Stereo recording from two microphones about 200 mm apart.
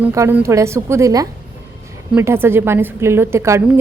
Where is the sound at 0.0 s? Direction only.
15° right (ahead or behind).